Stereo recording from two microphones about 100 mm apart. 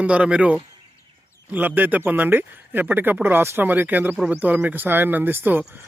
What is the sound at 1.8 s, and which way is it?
Speech, 15° right (ahead or behind).